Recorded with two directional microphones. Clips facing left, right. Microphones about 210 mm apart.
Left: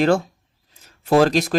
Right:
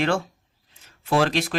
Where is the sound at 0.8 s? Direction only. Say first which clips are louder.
Left 6 dB; 40° left (ahead or behind).